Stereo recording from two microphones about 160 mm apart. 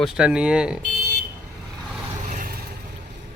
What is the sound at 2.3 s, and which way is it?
Vehicle, 65° right (ahead or behind).